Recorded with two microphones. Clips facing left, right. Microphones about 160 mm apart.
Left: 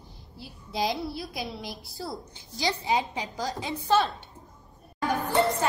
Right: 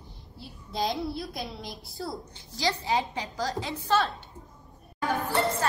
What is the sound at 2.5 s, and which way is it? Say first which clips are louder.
A woman's voice: left 1 dB; 15° left (ahead or behind).